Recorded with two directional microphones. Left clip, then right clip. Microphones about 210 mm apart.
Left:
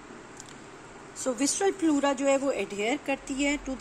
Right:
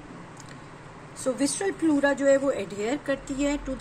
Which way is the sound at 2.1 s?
10° left (ahead or behind).